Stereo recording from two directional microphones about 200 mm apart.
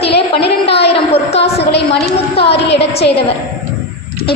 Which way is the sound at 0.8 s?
30° left (ahead or behind).